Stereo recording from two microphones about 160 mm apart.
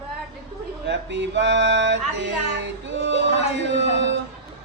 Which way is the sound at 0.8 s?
90° right.